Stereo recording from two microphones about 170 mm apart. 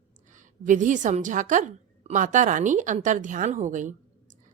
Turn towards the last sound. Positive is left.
turn(degrees=-50)  # may be behind; listen again after turning